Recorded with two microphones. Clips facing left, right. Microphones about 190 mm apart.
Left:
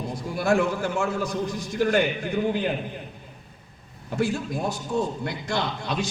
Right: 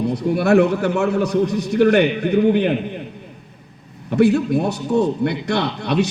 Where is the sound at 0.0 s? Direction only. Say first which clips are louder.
Right 9 dB; 65° right (ahead or behind).